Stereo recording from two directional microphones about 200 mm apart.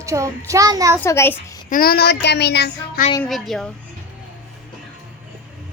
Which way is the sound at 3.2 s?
Centre (ahead or behind).